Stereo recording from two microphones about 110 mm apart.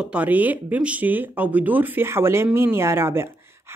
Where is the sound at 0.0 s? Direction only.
10° right (ahead or behind).